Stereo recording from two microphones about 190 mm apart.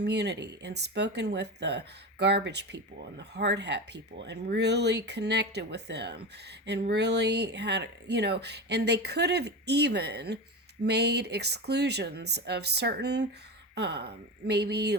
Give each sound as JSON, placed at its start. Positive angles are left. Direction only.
{"t": 0.0, "sound": "speech", "side_deg": -60}